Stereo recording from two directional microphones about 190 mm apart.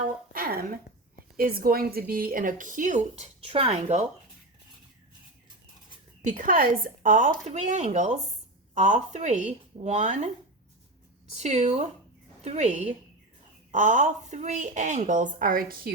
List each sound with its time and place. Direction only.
0.0 s a sound: 50° right (ahead or behind)
1.4 s speech: 50° right (ahead or behind)
6.2 s a woman's voice: 45° right (ahead or behind)
11.3 s a woman's voice: 35° right (ahead or behind)